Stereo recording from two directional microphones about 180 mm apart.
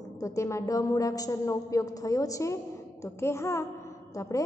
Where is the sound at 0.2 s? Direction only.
15° left (ahead or behind).